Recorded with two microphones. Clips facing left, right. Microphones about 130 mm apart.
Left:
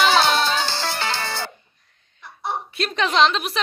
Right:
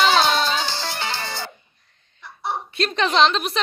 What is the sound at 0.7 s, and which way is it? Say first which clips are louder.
Music: left 2 dB; 85° left.